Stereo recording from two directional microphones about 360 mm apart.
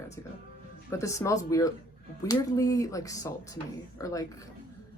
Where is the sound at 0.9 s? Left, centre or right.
Centre.